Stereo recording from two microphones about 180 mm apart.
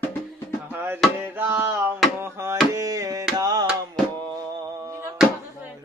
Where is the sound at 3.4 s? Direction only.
20° right (ahead or behind).